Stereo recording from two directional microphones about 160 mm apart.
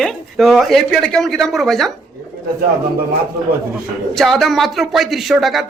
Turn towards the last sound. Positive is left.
turn(degrees=0)  # may be behind; listen again after turning